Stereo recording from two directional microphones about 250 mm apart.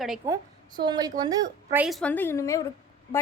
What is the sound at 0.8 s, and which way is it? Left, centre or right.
A woman's voice, centre.